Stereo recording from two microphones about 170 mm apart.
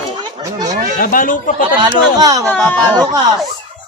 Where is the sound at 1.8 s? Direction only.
25° right (ahead or behind).